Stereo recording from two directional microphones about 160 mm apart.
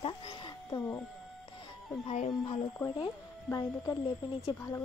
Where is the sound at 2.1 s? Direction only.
40° left (ahead or behind).